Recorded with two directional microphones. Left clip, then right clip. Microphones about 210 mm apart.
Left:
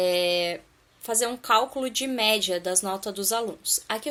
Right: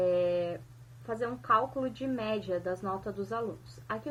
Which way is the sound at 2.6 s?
20° left (ahead or behind).